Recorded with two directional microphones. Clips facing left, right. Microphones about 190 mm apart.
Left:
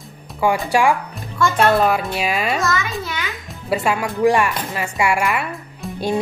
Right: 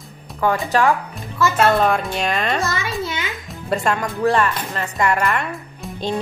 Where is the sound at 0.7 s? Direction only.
10° left (ahead or behind).